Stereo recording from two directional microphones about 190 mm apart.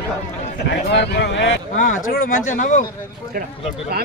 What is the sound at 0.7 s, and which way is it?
Speech, 60° left (ahead or behind).